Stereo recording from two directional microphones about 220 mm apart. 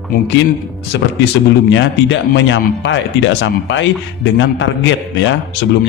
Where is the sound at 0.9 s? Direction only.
50° left (ahead or behind).